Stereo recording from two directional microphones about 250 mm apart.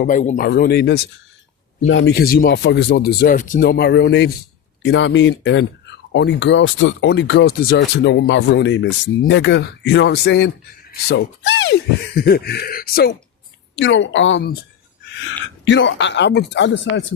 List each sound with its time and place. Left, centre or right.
0.0 s speech: left
15.0 s a sound: left
15.6 s speech: left